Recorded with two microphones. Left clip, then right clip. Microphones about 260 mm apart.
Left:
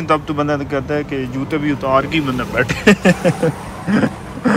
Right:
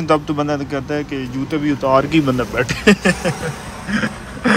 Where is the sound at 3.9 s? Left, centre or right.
Centre.